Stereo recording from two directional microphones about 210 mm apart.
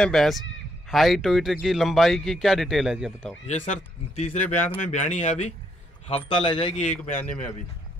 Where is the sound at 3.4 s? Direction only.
35° left (ahead or behind).